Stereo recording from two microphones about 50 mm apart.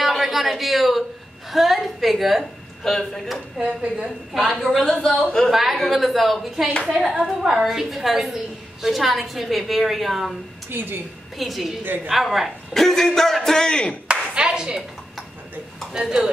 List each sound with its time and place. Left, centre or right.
0.0 s a woman's voice: centre
3.5 s a woman's voice: centre
5.1 s a woman's voice: centre
5.5 s a woman's voice: centre
7.1 s a woman's voice: centre
7.6 s a woman's voice: centre
10.7 s a woman's voice: right
11.3 s a woman's voice: centre
11.8 s a woman's voice: right
12.1 s a woman's voice: centre
14.3 s clapping: centre
15.9 s a woman's voice: centre